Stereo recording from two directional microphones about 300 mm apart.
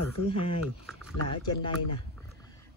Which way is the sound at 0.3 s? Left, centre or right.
Centre.